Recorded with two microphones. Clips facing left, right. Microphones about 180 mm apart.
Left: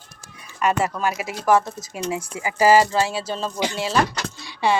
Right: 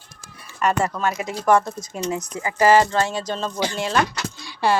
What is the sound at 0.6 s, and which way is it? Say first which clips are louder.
Speech: even; centre (ahead or behind).